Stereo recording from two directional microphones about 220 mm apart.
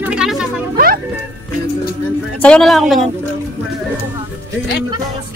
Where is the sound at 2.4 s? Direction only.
5° left (ahead or behind).